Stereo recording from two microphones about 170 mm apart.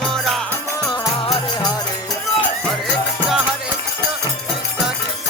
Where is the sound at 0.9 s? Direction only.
25° left (ahead or behind).